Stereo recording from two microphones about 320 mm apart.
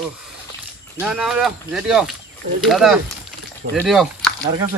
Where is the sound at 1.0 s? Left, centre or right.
Centre.